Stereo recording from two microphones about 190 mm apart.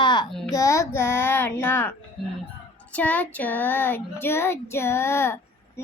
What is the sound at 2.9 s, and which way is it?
Child singing, 10° left (ahead or behind).